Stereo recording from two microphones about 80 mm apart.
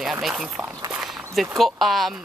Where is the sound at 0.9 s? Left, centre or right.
Centre.